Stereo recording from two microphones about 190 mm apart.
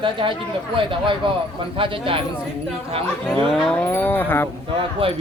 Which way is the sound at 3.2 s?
Centre (ahead or behind).